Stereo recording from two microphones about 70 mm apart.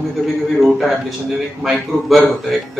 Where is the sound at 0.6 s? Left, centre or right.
Centre.